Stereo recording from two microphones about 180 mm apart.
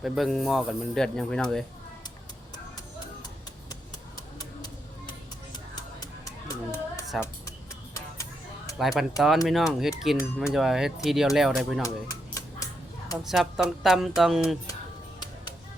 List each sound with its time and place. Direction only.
0.0 s speech: centre (ahead or behind)
5.7 s a sound: 20° left (ahead or behind)
8.8 s speech: centre (ahead or behind)
10.2 s cutlery: 15° left (ahead or behind)
10.5 s speech: centre (ahead or behind)
11.8 s a sound: 20° left (ahead or behind)
13.2 s speech: centre (ahead or behind)